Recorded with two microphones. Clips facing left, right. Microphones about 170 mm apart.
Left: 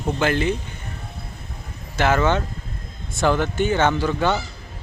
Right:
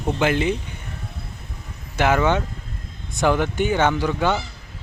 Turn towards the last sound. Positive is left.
turn(degrees=-15)  # may be behind; listen again after turning